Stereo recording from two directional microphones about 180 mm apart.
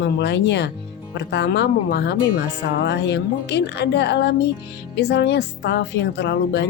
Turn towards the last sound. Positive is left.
turn(degrees=70)  # may be behind; listen again after turning